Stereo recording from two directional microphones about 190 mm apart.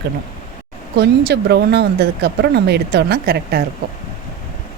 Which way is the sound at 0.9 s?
60° right (ahead or behind).